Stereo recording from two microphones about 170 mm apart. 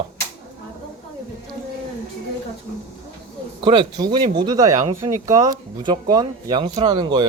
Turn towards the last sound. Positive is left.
turn(degrees=-25)  # may be behind; listen again after turning